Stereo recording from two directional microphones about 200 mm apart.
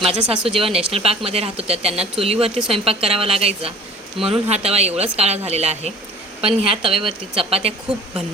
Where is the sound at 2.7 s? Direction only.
30° right (ahead or behind).